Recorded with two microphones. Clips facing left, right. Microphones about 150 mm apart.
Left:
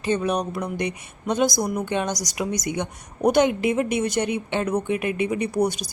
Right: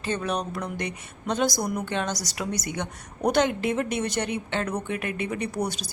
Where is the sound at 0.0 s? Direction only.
15° left (ahead or behind).